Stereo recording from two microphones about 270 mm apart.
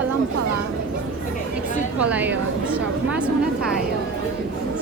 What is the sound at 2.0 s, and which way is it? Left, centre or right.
Speech, centre.